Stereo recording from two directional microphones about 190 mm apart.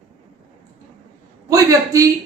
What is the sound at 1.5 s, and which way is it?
Speech, 15° right (ahead or behind).